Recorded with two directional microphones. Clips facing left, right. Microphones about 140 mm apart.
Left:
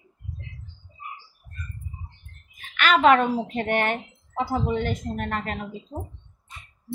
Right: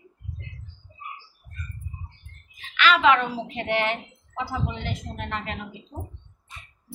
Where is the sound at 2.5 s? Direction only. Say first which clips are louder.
Even; 50° left (ahead or behind).